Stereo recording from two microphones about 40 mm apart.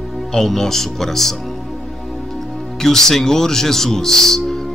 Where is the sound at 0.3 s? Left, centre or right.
Centre.